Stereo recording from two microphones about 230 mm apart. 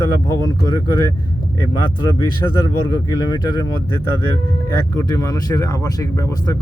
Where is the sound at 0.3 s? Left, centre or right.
Centre.